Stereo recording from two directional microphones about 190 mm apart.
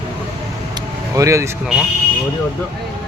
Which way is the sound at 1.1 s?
15° right (ahead or behind).